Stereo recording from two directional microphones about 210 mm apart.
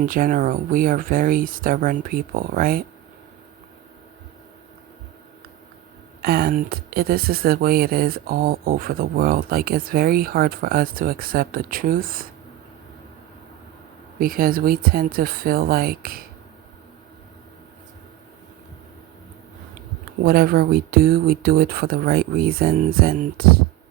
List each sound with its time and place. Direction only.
0.0 s speech: 40° right (ahead or behind)
6.2 s speech: 50° right (ahead or behind)
14.2 s speech: 45° right (ahead or behind)
20.2 s speech: 45° right (ahead or behind)